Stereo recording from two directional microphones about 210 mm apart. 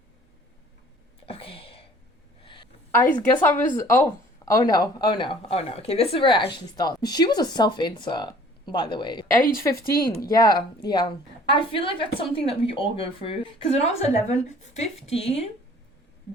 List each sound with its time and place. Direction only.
1.3 s a sound: 25° left (ahead or behind)
2.9 s a woman's voice: 10° left (ahead or behind)
3.5 s speech: 40° left (ahead or behind)
3.8 s speech: 15° left (ahead or behind)
9.3 s speech: 40° left (ahead or behind)
10.1 s speech: 15° left (ahead or behind)